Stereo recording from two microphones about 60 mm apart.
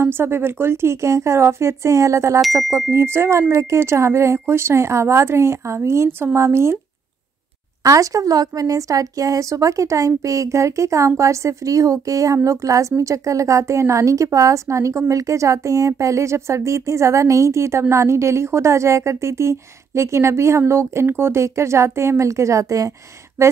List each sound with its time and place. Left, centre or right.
0.0 s a woman's voice: right
7.8 s a woman's voice: right